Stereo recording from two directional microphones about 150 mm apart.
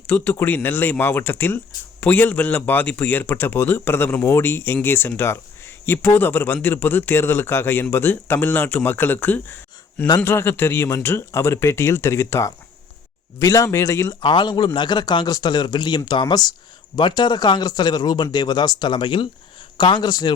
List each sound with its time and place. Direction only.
0.1 s a man's voice: 15° left (ahead or behind)